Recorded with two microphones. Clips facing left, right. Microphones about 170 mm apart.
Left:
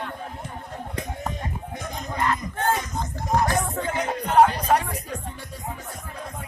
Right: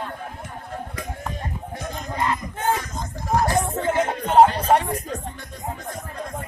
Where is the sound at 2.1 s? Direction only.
20° right (ahead or behind).